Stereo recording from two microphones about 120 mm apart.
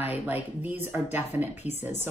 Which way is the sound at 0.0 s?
15° right (ahead or behind).